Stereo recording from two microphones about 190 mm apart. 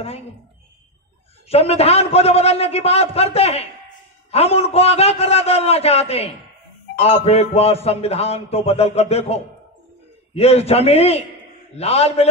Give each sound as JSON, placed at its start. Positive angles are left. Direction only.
{"t": 1.5, "sound": "a man's voice", "side_deg": 35}